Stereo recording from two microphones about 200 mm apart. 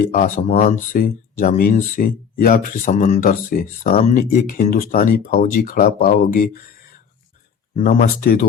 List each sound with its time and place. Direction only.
0.0 s speech: 40° left (ahead or behind)
7.8 s speech: 45° left (ahead or behind)